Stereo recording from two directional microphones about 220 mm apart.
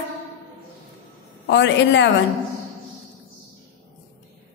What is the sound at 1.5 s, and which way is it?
Speech, 55° left (ahead or behind).